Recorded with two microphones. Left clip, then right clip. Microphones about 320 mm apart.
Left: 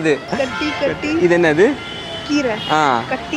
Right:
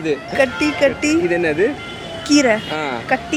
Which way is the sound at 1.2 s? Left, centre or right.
Left.